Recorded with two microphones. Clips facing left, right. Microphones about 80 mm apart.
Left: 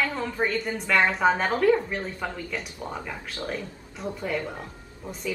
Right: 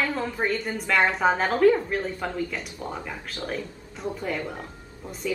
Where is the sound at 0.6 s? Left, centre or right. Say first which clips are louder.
Even; centre.